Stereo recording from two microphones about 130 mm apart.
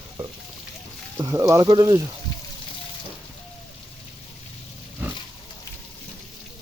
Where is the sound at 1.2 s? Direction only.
30° right (ahead or behind).